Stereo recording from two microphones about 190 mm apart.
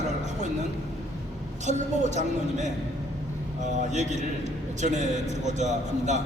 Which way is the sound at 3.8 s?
40° right (ahead or behind).